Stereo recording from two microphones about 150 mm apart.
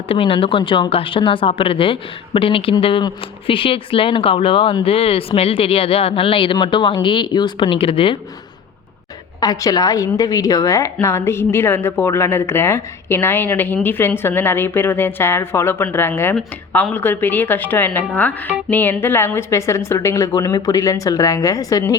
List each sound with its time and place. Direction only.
0.1 s a woman's voice: 35° left (ahead or behind)
9.4 s a woman's voice: 25° left (ahead or behind)